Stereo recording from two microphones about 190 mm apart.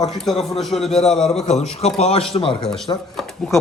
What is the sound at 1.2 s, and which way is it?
A man's voice, 35° left (ahead or behind).